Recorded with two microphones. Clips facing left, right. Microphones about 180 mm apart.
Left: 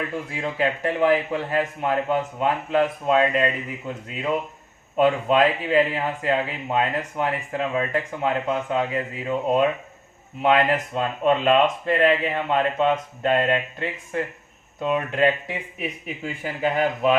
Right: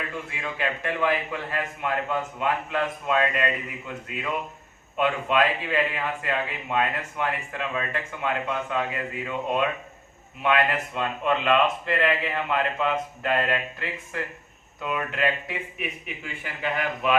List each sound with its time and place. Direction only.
0.3 s a man's voice: 35° left (ahead or behind)
15.8 s a man's voice: 40° left (ahead or behind)